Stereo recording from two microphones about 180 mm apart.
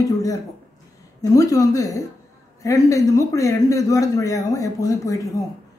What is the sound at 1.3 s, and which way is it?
Speech, 20° left (ahead or behind).